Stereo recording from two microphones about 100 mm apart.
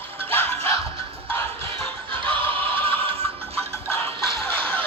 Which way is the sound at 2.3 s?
65° right (ahead or behind).